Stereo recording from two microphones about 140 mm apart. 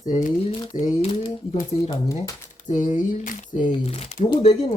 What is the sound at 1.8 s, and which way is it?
Speech, 25° left (ahead or behind).